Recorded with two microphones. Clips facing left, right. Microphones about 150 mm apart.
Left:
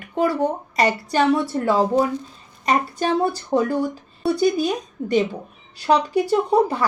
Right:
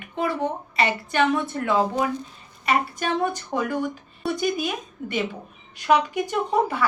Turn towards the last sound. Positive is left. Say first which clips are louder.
# left 4 dB
turn(degrees=35)  # may be behind; listen again after turning